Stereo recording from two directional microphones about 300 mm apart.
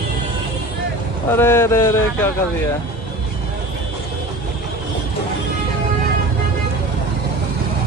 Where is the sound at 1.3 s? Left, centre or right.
Centre.